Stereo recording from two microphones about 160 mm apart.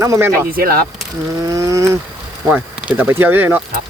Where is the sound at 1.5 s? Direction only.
20° right (ahead or behind).